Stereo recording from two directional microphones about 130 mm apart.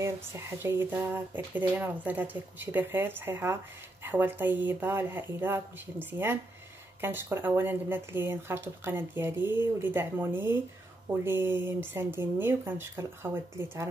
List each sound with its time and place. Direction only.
0.0 s speech: 20° right (ahead or behind)